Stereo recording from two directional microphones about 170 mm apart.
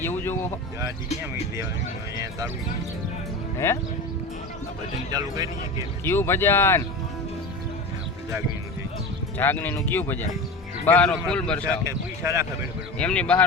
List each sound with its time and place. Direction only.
0.0 s speech: 10° left (ahead or behind)
0.8 s speech: 15° right (ahead or behind)
3.6 s a man's voice: 15° left (ahead or behind)
5.1 s speech: 25° right (ahead or behind)
6.1 s a man's voice: 15° left (ahead or behind)
9.4 s a man's voice: 10° left (ahead or behind)
11.9 s speech: 15° right (ahead or behind)
13.0 s a man's voice: 5° left (ahead or behind)